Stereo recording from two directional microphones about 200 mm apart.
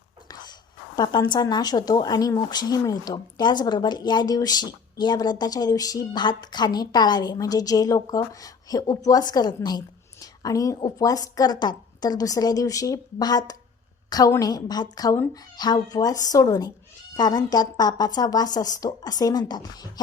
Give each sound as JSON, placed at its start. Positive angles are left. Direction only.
{"t": 0.9, "sound": "speech", "side_deg": 20}